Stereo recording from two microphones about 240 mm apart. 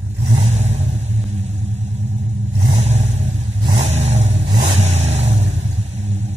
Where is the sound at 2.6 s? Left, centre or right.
Right.